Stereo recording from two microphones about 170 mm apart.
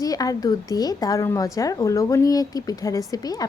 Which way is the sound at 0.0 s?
20° left (ahead or behind).